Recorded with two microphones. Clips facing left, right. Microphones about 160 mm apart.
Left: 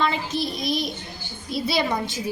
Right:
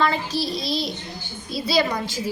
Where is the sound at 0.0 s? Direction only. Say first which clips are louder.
Right 2 dB; 20° left (ahead or behind).